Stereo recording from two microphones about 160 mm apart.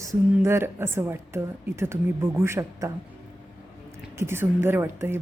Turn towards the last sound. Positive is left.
turn(degrees=-15)  # may be behind; listen again after turning